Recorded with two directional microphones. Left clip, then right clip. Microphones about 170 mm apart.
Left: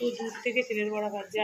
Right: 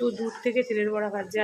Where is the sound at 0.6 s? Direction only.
30° right (ahead or behind).